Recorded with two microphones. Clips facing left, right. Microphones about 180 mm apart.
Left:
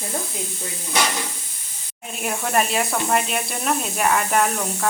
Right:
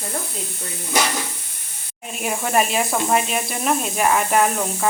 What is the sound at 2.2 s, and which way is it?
Speech, 5° right (ahead or behind).